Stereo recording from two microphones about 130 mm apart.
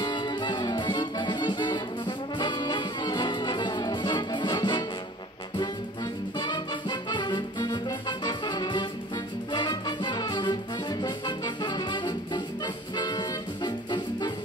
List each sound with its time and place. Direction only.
0.0 s music: 35° left (ahead or behind)
6.3 s music: 35° left (ahead or behind)